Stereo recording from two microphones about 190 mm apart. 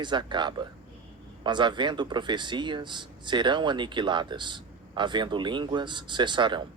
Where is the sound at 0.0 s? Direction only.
25° right (ahead or behind).